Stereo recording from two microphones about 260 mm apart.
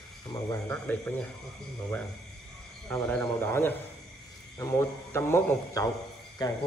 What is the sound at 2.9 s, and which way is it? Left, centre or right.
A man's voice, centre.